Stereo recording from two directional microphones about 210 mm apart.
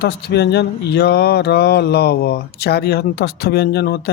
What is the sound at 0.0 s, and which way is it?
Speech, 50° left (ahead or behind).